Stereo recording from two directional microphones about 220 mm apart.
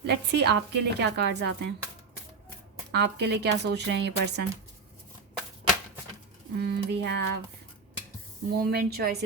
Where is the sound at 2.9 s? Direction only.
50° right (ahead or behind).